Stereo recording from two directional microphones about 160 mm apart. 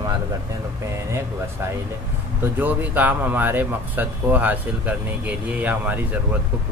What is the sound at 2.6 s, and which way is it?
Speech, 10° right (ahead or behind).